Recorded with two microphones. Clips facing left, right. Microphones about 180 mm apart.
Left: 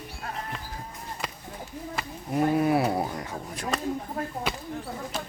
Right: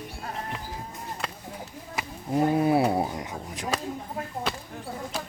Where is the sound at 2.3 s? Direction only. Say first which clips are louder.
Right 1 dB; 25° right (ahead or behind).